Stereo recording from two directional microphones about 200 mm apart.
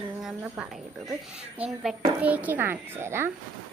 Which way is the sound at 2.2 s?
5° right (ahead or behind).